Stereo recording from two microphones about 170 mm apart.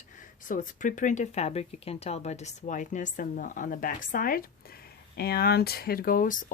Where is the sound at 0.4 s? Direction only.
50° left (ahead or behind).